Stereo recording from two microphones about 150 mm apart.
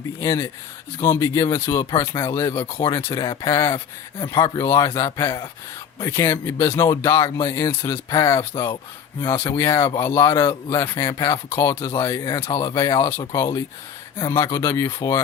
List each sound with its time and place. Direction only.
0.2 s speech: 20° left (ahead or behind)
1.7 s a man's voice: 30° left (ahead or behind)
6.1 s speech: 20° left (ahead or behind)
9.6 s speech: 15° left (ahead or behind)